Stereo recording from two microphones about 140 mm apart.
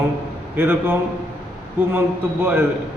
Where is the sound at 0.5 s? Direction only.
15° right (ahead or behind).